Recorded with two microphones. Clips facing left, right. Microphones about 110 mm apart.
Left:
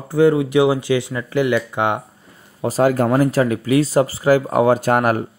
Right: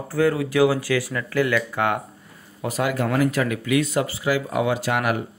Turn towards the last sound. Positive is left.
turn(degrees=45)  # may be behind; listen again after turning